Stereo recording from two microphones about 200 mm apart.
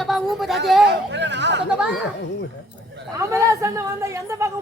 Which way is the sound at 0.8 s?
60° right (ahead or behind).